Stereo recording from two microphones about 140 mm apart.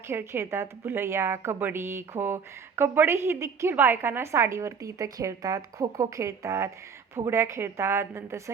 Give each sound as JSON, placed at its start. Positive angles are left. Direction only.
{"t": 0.1, "sound": "a woman's voice", "side_deg": -15}